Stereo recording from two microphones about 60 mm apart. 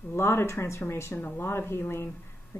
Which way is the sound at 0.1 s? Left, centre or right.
Left.